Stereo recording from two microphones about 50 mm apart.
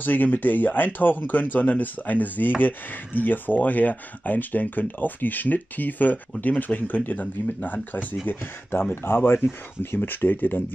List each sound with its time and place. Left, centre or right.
0.0 s speech: left